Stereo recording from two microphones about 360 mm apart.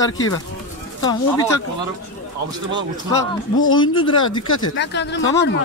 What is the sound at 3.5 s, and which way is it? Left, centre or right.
Speech, left.